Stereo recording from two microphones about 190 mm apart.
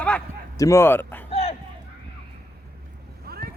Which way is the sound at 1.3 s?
30° left (ahead or behind).